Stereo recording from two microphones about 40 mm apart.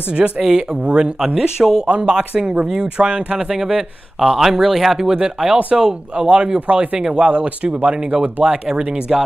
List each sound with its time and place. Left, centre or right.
0.1 s speech: right
0.8 s speech: right
1.2 s speech: centre
1.9 s speech: right; by 5.1 s centre
5.4 s speech: right